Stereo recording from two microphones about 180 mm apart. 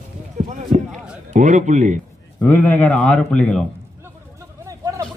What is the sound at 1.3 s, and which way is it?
Speech, 45° right (ahead or behind).